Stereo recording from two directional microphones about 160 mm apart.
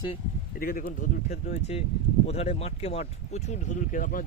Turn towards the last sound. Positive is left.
turn(degrees=60)  # may be behind; listen again after turning